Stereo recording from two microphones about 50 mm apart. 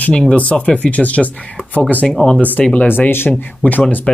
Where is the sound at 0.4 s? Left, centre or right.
Left.